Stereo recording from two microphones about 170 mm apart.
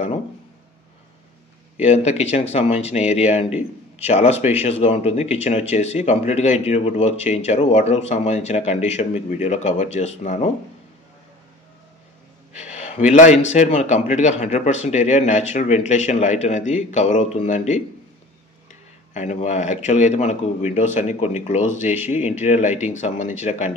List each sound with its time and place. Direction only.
1.8 s speech: 40° left (ahead or behind)
12.7 s a sound: 40° left (ahead or behind)
13.1 s speech: 50° left (ahead or behind)
19.1 s speech: 45° left (ahead or behind)
21.9 s speech: 10° right (ahead or behind)
22.4 s speech: 45° left (ahead or behind)